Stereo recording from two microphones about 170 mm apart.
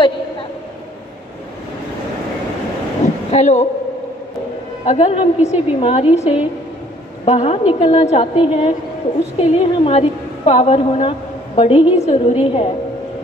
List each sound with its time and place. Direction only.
3.3 s a man's voice: 45° left (ahead or behind)
4.8 s a woman's voice: 40° left (ahead or behind)